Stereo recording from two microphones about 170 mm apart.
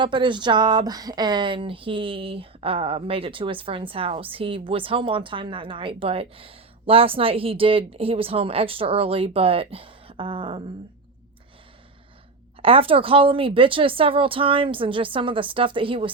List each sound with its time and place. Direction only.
0.0 s speech: 30° right (ahead or behind)
12.6 s speech: 30° right (ahead or behind)